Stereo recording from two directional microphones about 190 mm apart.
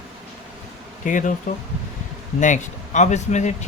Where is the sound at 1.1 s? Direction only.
40° left (ahead or behind).